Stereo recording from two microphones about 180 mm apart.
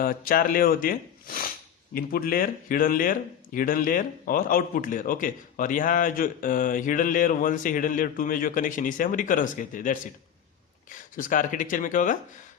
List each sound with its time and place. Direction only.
0.0 s speech: 50° left (ahead or behind)